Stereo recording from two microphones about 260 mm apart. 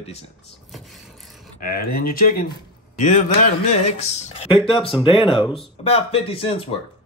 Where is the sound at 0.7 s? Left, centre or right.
Centre.